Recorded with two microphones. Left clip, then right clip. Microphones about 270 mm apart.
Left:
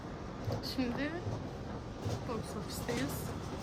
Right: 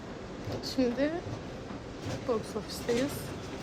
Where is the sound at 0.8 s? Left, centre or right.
Centre.